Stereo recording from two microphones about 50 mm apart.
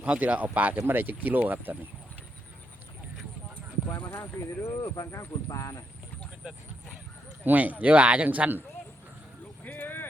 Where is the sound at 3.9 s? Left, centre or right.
Left.